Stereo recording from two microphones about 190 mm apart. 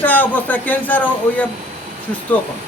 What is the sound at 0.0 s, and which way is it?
Speech, 10° left (ahead or behind).